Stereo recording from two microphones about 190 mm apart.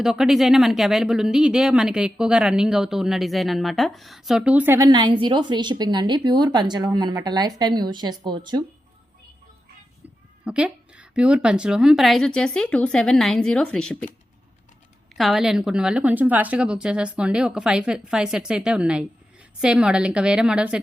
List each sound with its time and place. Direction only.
0.0 s speech: centre (ahead or behind)
4.9 s a woman's voice: 25° right (ahead or behind)
10.4 s speech: 5° right (ahead or behind)
15.1 s speech: centre (ahead or behind)